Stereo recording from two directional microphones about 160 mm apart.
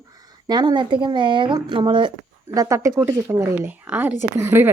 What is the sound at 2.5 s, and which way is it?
Speech, 20° right (ahead or behind).